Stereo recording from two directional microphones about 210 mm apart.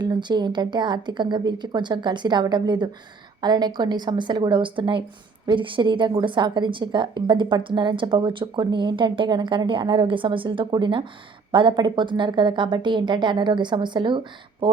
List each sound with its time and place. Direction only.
0.0 s a woman's voice: 20° right (ahead or behind)